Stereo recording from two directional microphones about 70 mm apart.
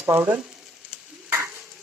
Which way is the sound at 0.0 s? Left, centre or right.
Right.